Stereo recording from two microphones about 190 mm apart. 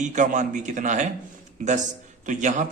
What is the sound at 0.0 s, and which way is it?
Speech, 40° right (ahead or behind).